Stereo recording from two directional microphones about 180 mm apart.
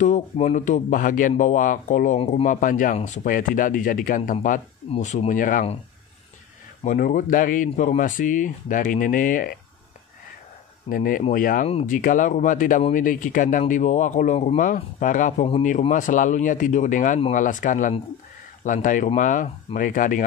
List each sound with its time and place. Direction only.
0.0 s speech: 40° left (ahead or behind)
6.8 s speech: 45° left (ahead or behind)
10.9 s speech: 50° left (ahead or behind)